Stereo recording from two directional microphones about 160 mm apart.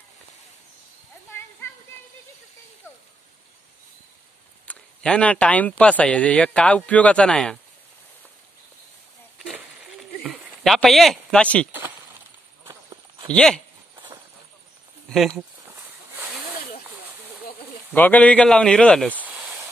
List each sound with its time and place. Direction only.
4.6 s speech: 5° left (ahead or behind)
9.4 s a sound: centre (ahead or behind)
10.2 s speech: centre (ahead or behind)
12.6 s walk: 20° right (ahead or behind)
13.3 s speech: 5° left (ahead or behind)
15.0 s speech: centre (ahead or behind)
17.9 s speech: 10° left (ahead or behind)
19.0 s snake: 10° right (ahead or behind)